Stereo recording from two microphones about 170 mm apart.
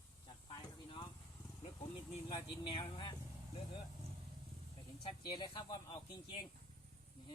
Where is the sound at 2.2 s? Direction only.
30° left (ahead or behind).